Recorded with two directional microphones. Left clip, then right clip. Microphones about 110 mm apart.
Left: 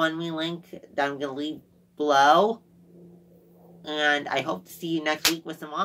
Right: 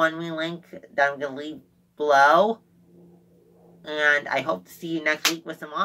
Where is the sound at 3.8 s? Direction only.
20° left (ahead or behind).